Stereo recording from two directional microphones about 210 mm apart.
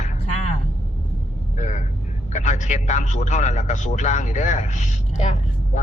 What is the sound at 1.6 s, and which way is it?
A man's voice, 35° left (ahead or behind).